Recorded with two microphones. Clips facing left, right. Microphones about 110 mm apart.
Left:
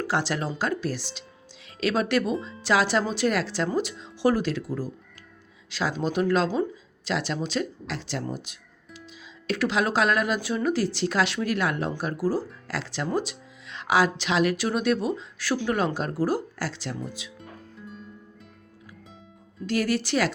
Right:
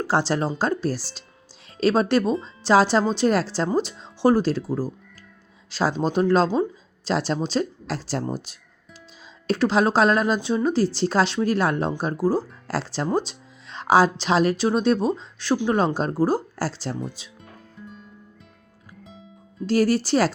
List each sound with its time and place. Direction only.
0.0 s speech: 30° right (ahead or behind)
17.8 s music: centre (ahead or behind)
19.0 s music: centre (ahead or behind)
19.6 s speech: 35° right (ahead or behind)